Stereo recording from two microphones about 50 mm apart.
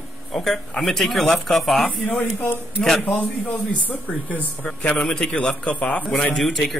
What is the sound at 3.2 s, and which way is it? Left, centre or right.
Speech, left.